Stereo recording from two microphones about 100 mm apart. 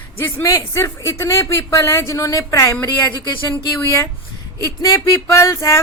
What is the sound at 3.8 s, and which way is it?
Speech, 30° left (ahead or behind).